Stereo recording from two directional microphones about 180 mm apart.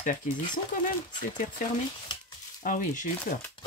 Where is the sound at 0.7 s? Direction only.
50° left (ahead or behind).